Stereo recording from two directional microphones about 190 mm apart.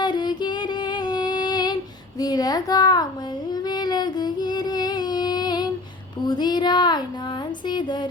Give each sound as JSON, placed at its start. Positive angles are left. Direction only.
{"t": 0.0, "sound": "music", "side_deg": 25}
{"t": 2.1, "sound": "speech", "side_deg": 20}
{"t": 3.5, "sound": "child singing", "side_deg": 20}
{"t": 7.7, "sound": "a woman's voice", "side_deg": 25}